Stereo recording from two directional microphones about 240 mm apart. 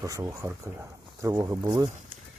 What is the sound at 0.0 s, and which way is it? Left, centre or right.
Speech, centre.